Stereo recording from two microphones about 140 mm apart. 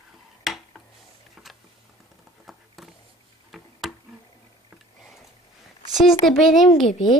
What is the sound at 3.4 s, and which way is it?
Tick, centre (ahead or behind).